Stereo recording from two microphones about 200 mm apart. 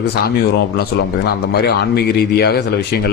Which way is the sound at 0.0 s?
55° left (ahead or behind).